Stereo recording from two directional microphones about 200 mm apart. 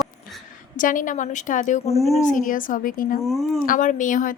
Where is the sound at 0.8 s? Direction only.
40° left (ahead or behind).